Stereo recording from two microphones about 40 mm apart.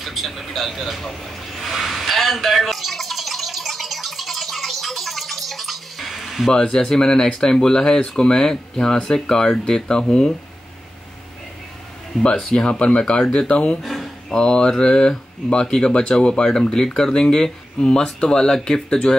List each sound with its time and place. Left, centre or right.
0.0 s vehicle: centre
6.5 s speech: centre
12.4 s speech: centre
13.8 s a sound: centre
14.4 s speech: left